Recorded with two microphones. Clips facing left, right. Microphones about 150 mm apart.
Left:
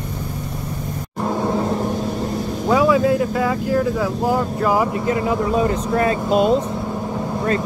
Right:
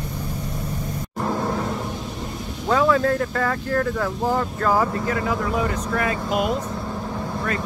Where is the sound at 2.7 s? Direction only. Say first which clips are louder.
Left 3 dB; 10° left (ahead or behind).